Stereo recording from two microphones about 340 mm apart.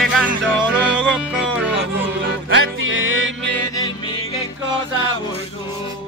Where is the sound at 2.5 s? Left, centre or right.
Right.